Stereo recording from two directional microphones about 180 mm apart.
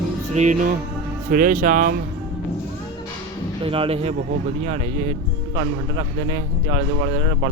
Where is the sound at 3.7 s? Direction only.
30° right (ahead or behind).